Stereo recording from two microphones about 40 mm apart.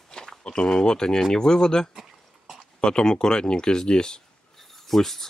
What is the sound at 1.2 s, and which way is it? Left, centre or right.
Speech, centre.